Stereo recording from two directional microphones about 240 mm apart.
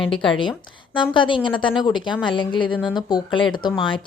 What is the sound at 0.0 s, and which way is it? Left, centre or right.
A woman's voice, left.